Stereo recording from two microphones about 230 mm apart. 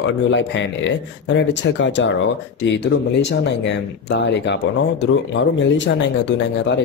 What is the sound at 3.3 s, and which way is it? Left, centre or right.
Speech, left.